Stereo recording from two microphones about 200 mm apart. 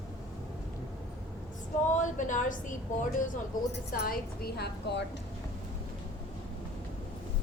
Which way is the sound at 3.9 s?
50° left (ahead or behind).